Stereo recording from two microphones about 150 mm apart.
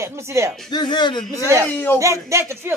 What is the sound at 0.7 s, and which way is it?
Speech, 30° left (ahead or behind).